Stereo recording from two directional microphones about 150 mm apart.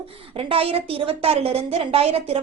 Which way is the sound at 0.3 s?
40° right (ahead or behind).